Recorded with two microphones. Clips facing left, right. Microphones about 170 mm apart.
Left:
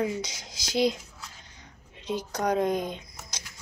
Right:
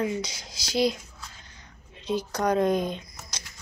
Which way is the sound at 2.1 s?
15° left (ahead or behind).